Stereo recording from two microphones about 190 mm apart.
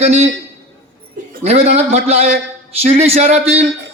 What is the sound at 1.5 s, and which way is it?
A man's voice, 35° right (ahead or behind).